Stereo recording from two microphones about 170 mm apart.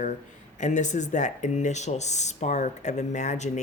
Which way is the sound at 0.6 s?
45° left (ahead or behind).